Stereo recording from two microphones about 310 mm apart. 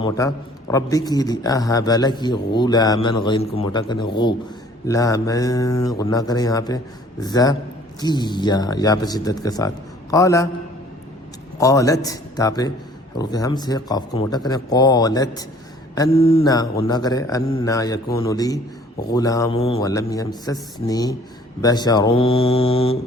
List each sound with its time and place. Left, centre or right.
0.0 s a man's voice: centre
11.5 s a man's voice: centre